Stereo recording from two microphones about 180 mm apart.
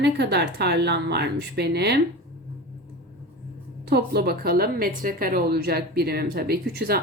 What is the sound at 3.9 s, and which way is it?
A woman's voice, 60° right (ahead or behind).